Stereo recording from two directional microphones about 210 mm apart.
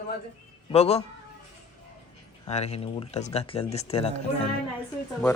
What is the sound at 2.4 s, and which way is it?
Speech, 30° left (ahead or behind).